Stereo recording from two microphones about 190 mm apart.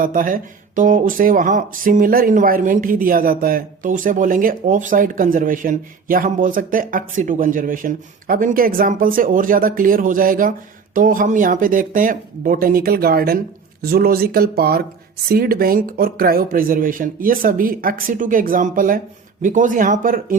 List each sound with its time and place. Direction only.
0.0 s speech: 45° right (ahead or behind)